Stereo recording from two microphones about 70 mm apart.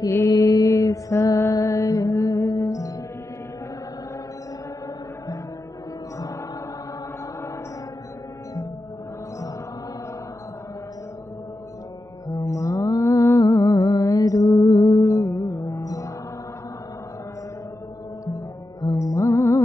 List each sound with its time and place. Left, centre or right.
0.3 s mantra: left
1.5 s music: left
12.3 s music: left
18.2 s music: left